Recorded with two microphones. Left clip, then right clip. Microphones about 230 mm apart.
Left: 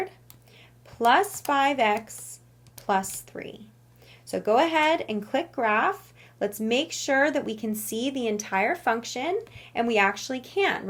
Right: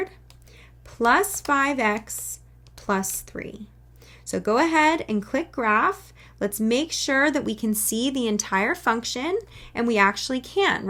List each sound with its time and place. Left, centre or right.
0.9 s speech: centre
3.2 s speech: centre